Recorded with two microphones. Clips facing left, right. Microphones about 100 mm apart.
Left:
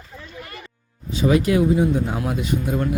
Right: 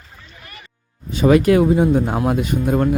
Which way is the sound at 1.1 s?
55° right (ahead or behind).